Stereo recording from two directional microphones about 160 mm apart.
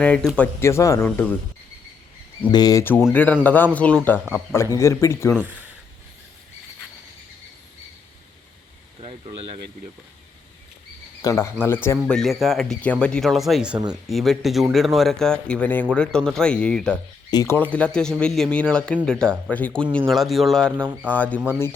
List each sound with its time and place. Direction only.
0.0 s speech: 5° left (ahead or behind)
2.5 s speech: 25° left (ahead or behind)
5.4 s speech: 10° right (ahead or behind)
9.0 s speech: 35° right (ahead or behind)
11.2 s speech: 20° left (ahead or behind)
12.1 s speech: centre (ahead or behind)
17.3 s speech: 15° left (ahead or behind)